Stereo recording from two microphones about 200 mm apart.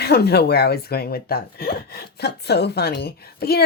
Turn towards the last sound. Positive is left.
turn(degrees=50)  # may be behind; listen again after turning